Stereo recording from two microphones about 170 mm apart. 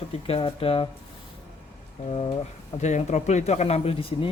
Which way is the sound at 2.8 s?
45° left (ahead or behind).